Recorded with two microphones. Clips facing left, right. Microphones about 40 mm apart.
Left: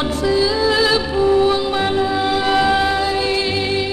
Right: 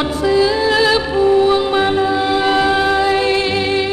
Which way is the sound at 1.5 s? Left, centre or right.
Right.